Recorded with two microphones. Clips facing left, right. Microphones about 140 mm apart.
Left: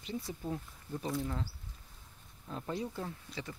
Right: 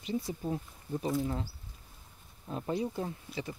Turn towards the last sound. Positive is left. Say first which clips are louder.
# right 4 dB
turn(degrees=-15)  # may be behind; listen again after turning